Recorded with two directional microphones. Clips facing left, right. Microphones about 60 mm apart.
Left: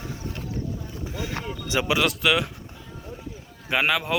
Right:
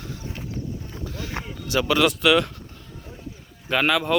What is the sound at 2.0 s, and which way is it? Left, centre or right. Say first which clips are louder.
Speech: right 6 dB; centre.